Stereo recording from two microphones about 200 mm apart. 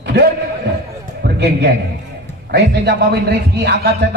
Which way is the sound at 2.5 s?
55° right (ahead or behind).